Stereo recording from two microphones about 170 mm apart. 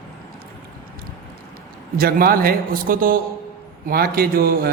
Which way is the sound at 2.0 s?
60° right (ahead or behind).